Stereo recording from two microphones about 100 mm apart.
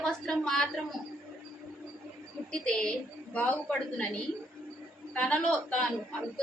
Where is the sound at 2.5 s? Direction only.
10° left (ahead or behind).